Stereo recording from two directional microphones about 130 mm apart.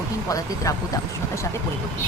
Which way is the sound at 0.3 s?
25° left (ahead or behind).